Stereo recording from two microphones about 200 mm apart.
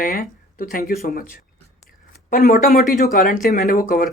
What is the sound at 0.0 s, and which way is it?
Speech, 45° left (ahead or behind).